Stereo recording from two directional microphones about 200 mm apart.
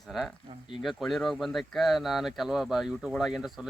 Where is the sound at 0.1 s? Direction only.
Centre (ahead or behind).